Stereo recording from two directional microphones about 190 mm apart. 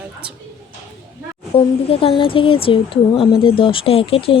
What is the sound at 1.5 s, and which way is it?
Speech, 30° left (ahead or behind).